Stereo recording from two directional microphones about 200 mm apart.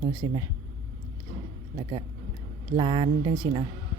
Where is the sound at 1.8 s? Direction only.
25° right (ahead or behind).